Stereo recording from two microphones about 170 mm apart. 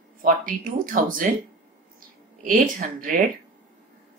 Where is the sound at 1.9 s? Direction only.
50° right (ahead or behind).